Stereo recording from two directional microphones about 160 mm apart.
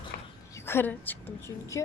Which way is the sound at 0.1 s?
75° left (ahead or behind).